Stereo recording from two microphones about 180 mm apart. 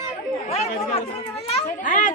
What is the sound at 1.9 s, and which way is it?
Speech, 50° left (ahead or behind).